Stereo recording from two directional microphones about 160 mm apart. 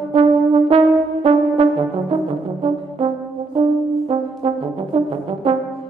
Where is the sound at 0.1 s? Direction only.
35° right (ahead or behind).